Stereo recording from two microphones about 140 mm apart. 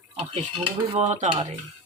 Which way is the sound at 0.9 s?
55° right (ahead or behind).